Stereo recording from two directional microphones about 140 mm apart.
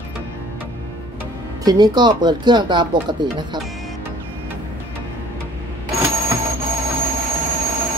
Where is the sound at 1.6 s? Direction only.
30° right (ahead or behind).